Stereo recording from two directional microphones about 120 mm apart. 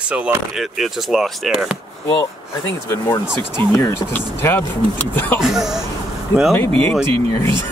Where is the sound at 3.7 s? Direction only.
25° left (ahead or behind).